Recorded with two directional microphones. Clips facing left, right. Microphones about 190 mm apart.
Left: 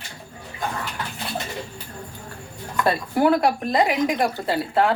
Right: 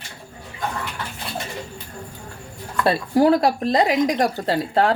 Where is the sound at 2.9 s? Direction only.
35° right (ahead or behind).